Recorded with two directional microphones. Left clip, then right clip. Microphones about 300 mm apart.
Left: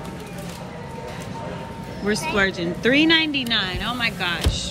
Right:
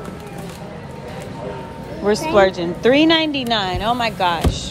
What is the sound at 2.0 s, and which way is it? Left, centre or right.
A woman's voice, centre.